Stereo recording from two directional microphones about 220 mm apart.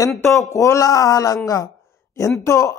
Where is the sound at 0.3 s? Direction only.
15° left (ahead or behind).